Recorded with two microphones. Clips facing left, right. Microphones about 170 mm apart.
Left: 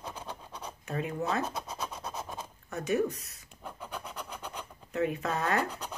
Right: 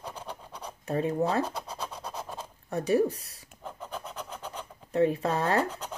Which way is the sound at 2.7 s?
35° right (ahead or behind).